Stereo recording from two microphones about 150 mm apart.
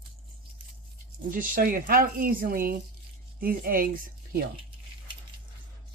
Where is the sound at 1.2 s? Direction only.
65° right (ahead or behind).